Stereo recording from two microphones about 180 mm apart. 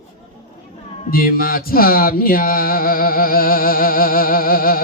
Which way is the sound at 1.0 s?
50° left (ahead or behind).